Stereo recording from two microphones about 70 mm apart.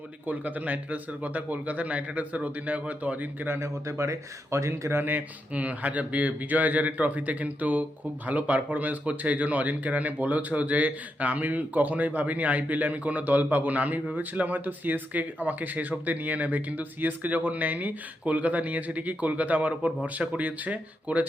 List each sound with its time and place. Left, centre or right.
0.3 s speech: right
5.1 s speech: right